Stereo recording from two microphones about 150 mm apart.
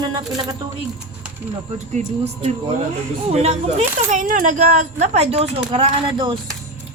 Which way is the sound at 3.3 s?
45° right (ahead or behind).